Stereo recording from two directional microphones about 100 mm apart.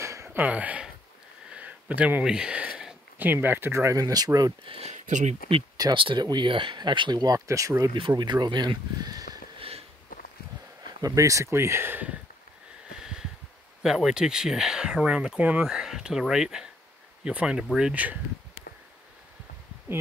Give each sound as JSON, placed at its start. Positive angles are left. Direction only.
{"t": 0.0, "sound": "a sound", "side_deg": -30}
{"t": 0.4, "sound": "speech", "side_deg": -15}
{"t": 1.5, "sound": "a sound", "side_deg": -15}
{"t": 3.2, "sound": "speech", "side_deg": -20}
{"t": 4.6, "sound": "speech", "side_deg": -75}
{"t": 5.9, "sound": "speech", "side_deg": -60}
{"t": 8.2, "sound": "speech", "side_deg": -50}
{"t": 9.6, "sound": "sniff", "side_deg": -80}
{"t": 10.9, "sound": "speech", "side_deg": -40}
{"t": 12.9, "sound": "a sound", "side_deg": -5}
{"t": 13.8, "sound": "speech", "side_deg": -5}